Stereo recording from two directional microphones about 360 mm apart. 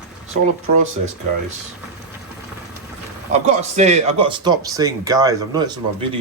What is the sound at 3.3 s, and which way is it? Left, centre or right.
Speech, centre.